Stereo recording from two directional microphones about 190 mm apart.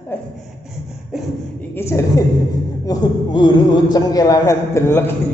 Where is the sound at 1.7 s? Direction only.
15° left (ahead or behind).